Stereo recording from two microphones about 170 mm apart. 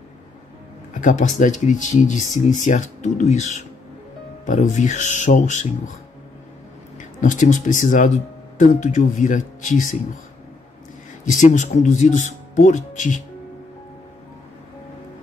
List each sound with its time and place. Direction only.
0.9 s speech: 50° left (ahead or behind)
7.2 s speech: 45° left (ahead or behind)
11.2 s speech: 45° left (ahead or behind)